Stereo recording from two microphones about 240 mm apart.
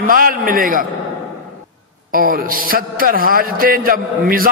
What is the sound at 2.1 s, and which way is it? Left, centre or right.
A man's voice, right.